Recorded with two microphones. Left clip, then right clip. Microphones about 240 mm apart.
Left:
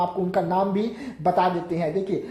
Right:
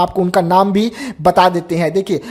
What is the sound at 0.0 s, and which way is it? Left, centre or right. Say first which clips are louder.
Speech: right 9 dB; right.